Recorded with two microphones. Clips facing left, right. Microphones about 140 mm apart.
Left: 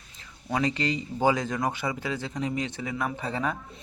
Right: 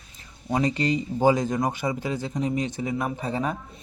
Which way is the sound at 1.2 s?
15° right (ahead or behind).